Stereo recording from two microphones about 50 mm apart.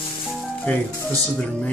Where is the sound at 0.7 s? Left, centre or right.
Left.